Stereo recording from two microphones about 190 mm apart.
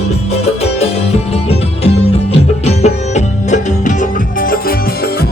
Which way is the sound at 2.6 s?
35° left (ahead or behind).